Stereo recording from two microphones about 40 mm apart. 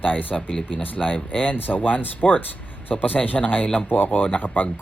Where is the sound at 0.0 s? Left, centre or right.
Left.